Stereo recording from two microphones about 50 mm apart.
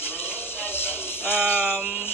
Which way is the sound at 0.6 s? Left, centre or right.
Left.